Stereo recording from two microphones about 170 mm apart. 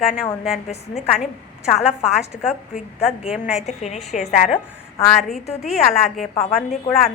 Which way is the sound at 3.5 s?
40° left (ahead or behind).